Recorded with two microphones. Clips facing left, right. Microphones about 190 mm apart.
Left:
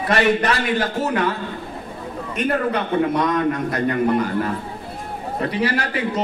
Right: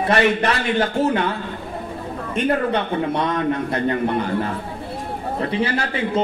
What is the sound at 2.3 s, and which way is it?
Speech, 30° right (ahead or behind).